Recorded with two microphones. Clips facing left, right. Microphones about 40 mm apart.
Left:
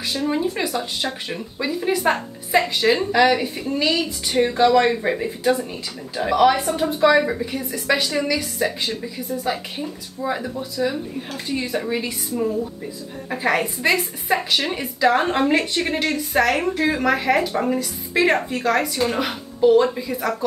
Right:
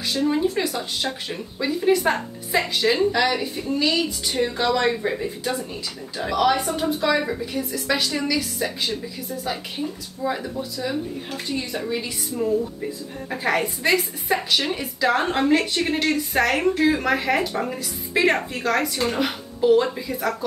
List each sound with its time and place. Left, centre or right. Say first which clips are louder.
0.1 s a woman's voice: right 2 dB; centre
2.8 s a woman's voice: left 2 dB; centre
6.6 s speech: left 3 dB; centre
6.9 s a woman's voice: left 7 dB; centre